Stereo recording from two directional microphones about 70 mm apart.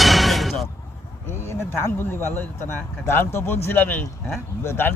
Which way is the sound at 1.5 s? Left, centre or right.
Left.